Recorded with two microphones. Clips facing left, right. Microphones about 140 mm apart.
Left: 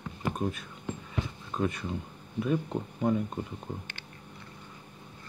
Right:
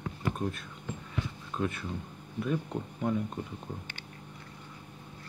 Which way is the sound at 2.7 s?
20° left (ahead or behind).